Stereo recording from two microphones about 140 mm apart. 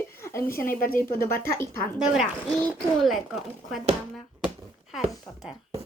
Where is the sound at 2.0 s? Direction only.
5° right (ahead or behind).